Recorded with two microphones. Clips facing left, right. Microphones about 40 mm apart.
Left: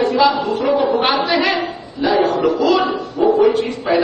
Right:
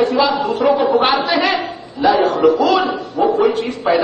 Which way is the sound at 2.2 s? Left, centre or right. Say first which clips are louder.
Right 2 dB; centre.